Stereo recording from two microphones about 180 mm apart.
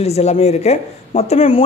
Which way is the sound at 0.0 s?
35° left (ahead or behind).